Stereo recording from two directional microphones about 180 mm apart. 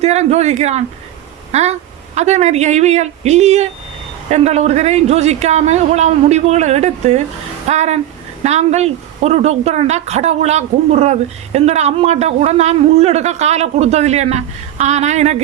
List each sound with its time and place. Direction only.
0.0 s speech: 40° right (ahead or behind)
2.1 s speech: 40° right (ahead or behind)